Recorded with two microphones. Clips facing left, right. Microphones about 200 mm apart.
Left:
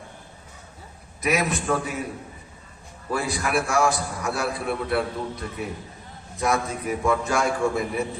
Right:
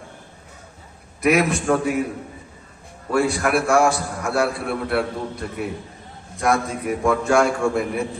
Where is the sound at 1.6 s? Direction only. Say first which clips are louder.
Right 6 dB; 60° right (ahead or behind).